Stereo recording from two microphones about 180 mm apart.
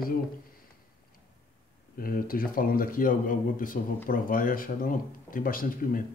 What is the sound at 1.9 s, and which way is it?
Speech, 55° left (ahead or behind).